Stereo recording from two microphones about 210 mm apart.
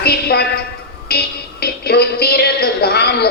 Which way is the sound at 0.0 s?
50° left (ahead or behind).